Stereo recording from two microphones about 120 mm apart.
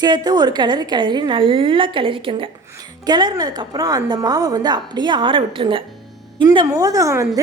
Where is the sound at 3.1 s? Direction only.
35° right (ahead or behind).